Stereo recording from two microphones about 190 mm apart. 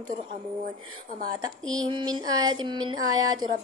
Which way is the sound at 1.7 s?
25° right (ahead or behind).